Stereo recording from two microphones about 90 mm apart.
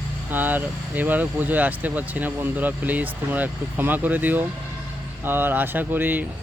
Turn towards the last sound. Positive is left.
turn(degrees=-20)  # may be behind; listen again after turning